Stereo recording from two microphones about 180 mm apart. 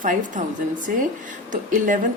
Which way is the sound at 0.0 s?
45° right (ahead or behind).